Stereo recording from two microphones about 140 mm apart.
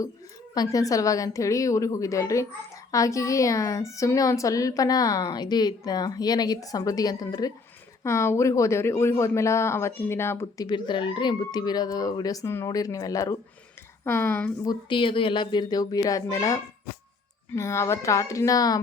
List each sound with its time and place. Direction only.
0.5 s speech: 25° left (ahead or behind)
14.6 s speech: 30° left (ahead or behind)